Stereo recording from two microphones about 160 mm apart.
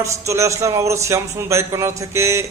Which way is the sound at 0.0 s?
20° right (ahead or behind).